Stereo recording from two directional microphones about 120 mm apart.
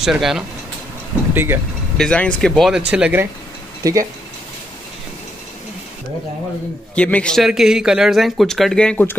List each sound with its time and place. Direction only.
0.0 s speech: 5° right (ahead or behind)
1.3 s speech: 20° right (ahead or behind)
2.0 s speech: 10° left (ahead or behind)
2.9 s speech: 10° right (ahead or behind)
3.8 s speech: 30° right (ahead or behind)
7.0 s a man's voice: 10° left (ahead or behind)
7.4 s speech: 5° right (ahead or behind)